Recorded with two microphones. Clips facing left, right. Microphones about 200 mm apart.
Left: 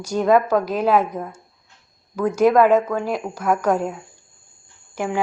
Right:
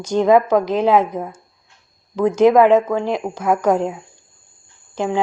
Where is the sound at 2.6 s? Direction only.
20° right (ahead or behind).